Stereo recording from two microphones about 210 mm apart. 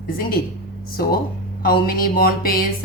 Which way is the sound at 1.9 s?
45° left (ahead or behind).